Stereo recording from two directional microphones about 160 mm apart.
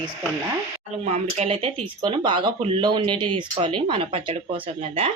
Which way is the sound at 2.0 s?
25° right (ahead or behind).